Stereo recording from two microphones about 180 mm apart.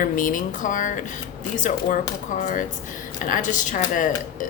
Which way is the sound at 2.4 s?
45° left (ahead or behind).